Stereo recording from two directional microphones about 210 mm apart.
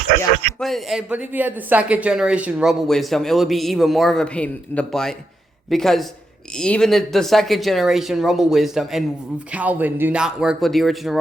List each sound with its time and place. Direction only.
0.6 s speech: centre (ahead or behind)